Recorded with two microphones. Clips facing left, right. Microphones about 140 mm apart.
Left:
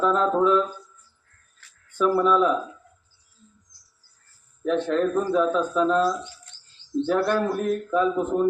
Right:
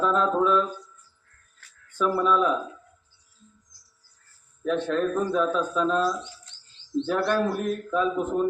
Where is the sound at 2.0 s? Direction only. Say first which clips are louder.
Left 3 dB; centre (ahead or behind).